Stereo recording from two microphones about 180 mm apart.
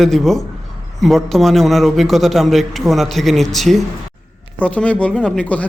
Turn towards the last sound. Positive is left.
turn(degrees=10)  # may be behind; listen again after turning